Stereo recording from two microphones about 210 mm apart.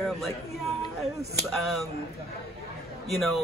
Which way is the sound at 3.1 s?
Centre (ahead or behind).